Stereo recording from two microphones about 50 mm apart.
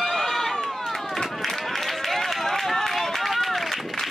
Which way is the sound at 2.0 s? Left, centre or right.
Centre.